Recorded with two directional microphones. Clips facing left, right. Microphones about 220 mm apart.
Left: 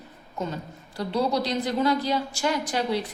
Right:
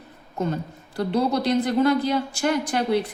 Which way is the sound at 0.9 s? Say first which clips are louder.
Right 3 dB; 55° right (ahead or behind).